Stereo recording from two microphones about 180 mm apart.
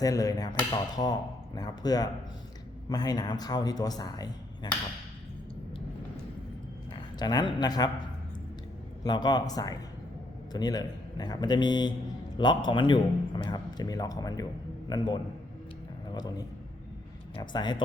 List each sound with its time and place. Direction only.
0.0 s a man's voice: 20° left (ahead or behind)
7.2 s a man's voice: 20° left (ahead or behind)
9.0 s a man's voice: 25° left (ahead or behind)
17.3 s a man's voice: 25° left (ahead or behind)